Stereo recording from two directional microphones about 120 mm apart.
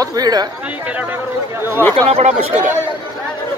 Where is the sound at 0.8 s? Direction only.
15° right (ahead or behind).